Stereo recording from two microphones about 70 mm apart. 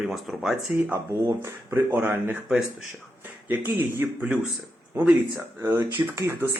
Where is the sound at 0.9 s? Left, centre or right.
Right.